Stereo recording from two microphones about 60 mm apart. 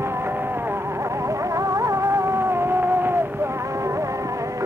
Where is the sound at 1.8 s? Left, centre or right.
Right.